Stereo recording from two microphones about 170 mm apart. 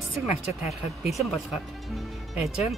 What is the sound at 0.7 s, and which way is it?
Speech, centre (ahead or behind).